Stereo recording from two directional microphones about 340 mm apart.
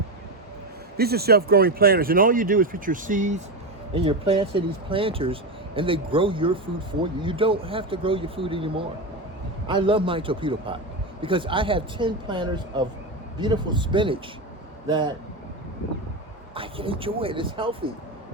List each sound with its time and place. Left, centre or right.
0.9 s speech: right
16.6 s speech: centre